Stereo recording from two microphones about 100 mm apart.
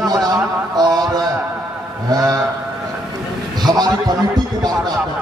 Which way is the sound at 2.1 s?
35° right (ahead or behind).